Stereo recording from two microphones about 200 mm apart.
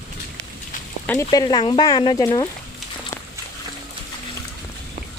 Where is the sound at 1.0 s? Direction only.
15° left (ahead or behind).